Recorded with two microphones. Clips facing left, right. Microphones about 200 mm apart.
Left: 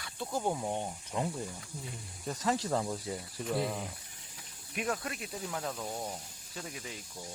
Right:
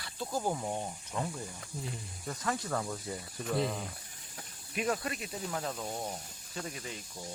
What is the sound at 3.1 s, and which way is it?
Speech, 5° left (ahead or behind).